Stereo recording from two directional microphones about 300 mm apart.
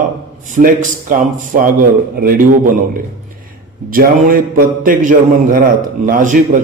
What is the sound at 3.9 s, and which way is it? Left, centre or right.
A man's voice, right.